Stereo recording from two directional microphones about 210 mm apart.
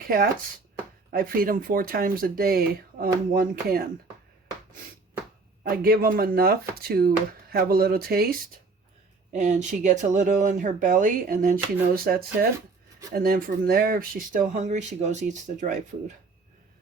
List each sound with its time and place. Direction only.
1.1 s speech: 40° right (ahead or behind)
5.6 s speech: 45° right (ahead or behind)
9.3 s speech: 35° right (ahead or behind)